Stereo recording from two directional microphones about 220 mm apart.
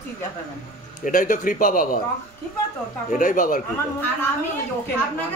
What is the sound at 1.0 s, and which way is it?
Speech, 35° left (ahead or behind).